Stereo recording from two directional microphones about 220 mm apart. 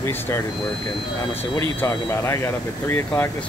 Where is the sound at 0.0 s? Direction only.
10° left (ahead or behind).